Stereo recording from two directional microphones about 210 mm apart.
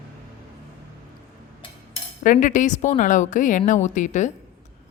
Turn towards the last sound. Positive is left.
turn(degrees=35)  # may be behind; listen again after turning